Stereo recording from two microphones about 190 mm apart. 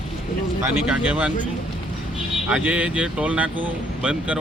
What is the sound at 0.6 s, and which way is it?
Speech, 5° right (ahead or behind).